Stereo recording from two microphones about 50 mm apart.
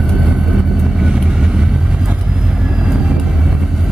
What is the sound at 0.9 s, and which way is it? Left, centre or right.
Vehicle, centre.